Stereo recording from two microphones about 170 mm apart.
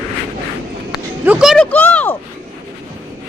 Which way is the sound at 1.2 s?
5° right (ahead or behind).